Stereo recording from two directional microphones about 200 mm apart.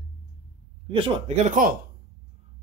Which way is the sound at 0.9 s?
30° right (ahead or behind).